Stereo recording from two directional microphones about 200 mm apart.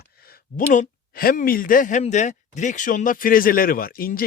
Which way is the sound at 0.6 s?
35° left (ahead or behind).